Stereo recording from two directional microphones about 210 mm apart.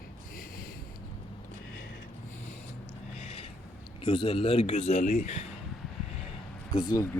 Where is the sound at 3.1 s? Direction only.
30° left (ahead or behind).